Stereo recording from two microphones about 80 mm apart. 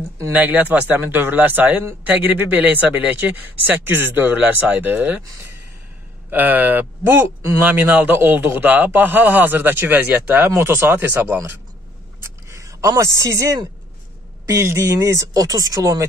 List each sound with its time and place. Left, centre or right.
0.3 s a man's voice: right
6.3 s a man's voice: right
10.5 s speech: right
12.2 s a sound: right
13.2 s speech: right